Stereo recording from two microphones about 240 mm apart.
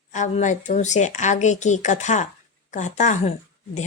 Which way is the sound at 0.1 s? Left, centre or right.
Left.